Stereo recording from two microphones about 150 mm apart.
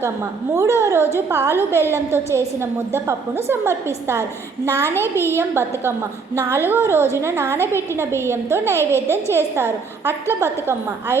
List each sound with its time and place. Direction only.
0.5 s a woman's voice: 20° right (ahead or behind)
8.8 s a child's voice: 15° left (ahead or behind)
9.2 s a woman's voice: 15° right (ahead or behind)